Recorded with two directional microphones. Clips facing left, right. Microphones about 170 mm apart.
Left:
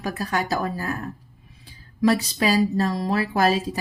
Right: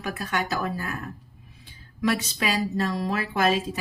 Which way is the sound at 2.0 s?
35° left (ahead or behind).